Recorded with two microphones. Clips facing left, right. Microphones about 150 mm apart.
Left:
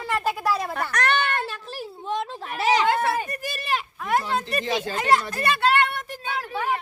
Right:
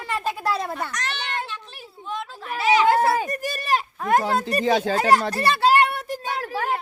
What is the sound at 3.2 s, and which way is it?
Speech, 40° right (ahead or behind).